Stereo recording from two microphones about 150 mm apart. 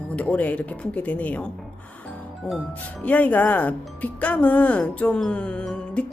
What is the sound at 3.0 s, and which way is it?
Speech, 10° left (ahead or behind).